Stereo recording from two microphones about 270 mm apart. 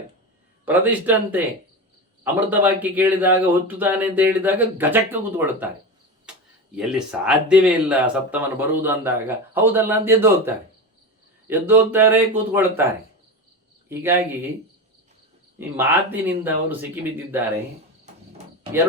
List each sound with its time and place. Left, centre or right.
0.6 s speech: centre
6.7 s speech: centre
13.8 s speech: centre
15.7 s speech: centre